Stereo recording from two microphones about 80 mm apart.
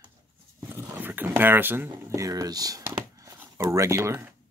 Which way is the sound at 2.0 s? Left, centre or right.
Right.